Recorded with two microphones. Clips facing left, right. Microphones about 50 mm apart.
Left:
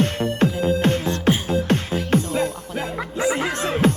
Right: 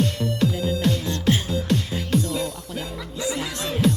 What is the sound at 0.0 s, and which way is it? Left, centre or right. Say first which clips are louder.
Music: left 3 dB; left.